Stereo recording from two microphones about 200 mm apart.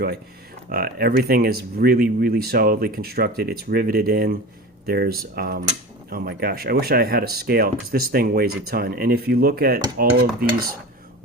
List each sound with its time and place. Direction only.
0.7 s speech: 50° right (ahead or behind)